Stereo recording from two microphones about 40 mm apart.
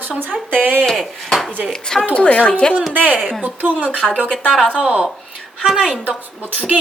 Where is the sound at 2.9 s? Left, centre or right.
Right.